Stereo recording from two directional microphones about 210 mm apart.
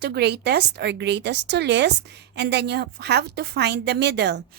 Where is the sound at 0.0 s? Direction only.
50° right (ahead or behind).